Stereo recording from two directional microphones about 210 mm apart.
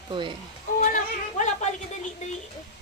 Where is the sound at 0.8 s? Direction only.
35° left (ahead or behind).